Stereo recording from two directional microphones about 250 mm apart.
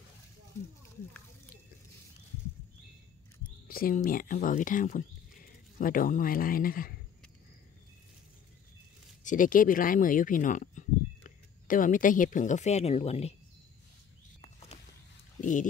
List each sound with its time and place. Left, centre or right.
3.6 s speech: left
9.2 s speech: left
14.4 s a sound: left